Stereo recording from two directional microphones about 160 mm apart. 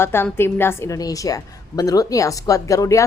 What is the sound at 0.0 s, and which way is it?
A woman's voice, 15° left (ahead or behind).